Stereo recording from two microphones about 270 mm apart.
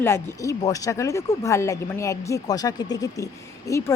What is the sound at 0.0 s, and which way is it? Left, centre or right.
A woman's voice, centre.